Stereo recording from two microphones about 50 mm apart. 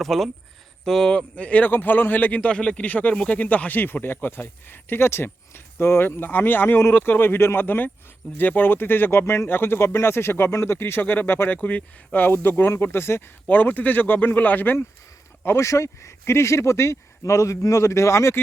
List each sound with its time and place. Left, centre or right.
0.0 s speech: centre
1.1 s speech: left
1.6 s speech: left
2.4 s speech: left
11.0 s speech: left
11.5 s speech: left
12.9 s speech: left
13.5 s speech: left
15.5 s speech: left